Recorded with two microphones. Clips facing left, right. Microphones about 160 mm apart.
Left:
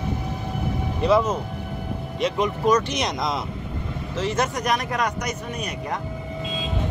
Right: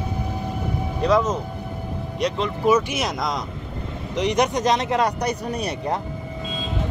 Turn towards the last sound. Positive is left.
turn(degrees=-30)  # may be behind; listen again after turning